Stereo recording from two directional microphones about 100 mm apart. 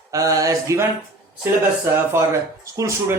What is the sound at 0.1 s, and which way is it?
Speech, 35° right (ahead or behind).